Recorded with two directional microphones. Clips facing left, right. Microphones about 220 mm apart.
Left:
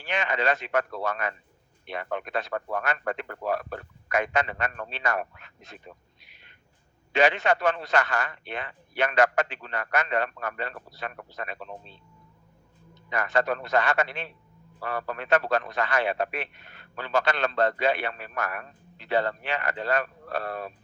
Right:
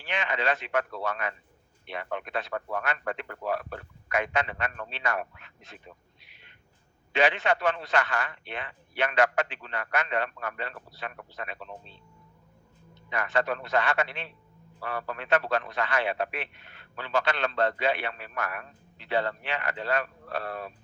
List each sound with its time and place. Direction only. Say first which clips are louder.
0.0 s a man's voice: left 3 dB; 40° left (ahead or behind)
6.2 s a sound: even; 45° left (ahead or behind)
7.1 s a man's voice: left 2 dB; 40° left (ahead or behind)
13.1 s a man's voice: left 2 dB; 40° left (ahead or behind)